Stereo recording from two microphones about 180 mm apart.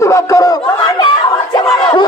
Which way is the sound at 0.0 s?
15° left (ahead or behind).